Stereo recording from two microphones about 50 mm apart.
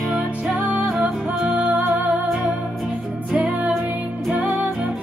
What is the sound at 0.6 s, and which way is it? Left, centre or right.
Music, right.